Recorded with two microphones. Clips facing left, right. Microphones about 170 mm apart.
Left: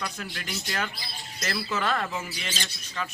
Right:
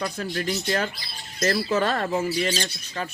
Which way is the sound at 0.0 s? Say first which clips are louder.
Right 8 dB; 35° right (ahead or behind).